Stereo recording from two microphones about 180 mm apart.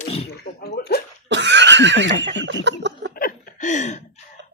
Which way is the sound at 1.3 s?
75° right (ahead or behind).